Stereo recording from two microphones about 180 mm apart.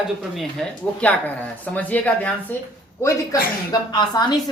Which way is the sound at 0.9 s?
10° left (ahead or behind).